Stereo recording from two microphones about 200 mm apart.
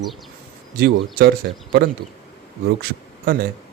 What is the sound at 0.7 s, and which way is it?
Speech, 50° right (ahead or behind).